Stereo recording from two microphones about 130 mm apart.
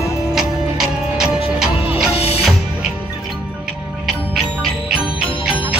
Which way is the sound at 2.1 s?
50° left (ahead or behind).